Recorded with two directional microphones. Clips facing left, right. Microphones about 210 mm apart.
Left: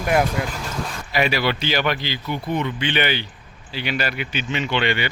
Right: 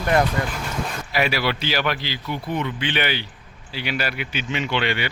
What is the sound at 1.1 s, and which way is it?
Speech, 5° right (ahead or behind).